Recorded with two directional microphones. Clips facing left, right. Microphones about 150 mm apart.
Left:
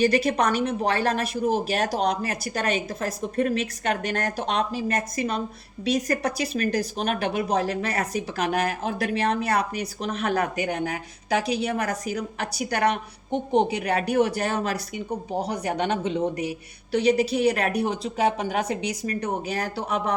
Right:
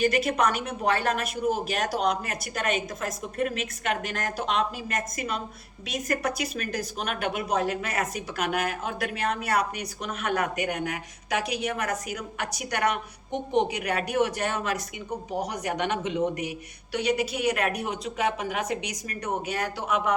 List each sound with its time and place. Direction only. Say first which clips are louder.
0.0 s speech: left 3 dB; 35° left (ahead or behind)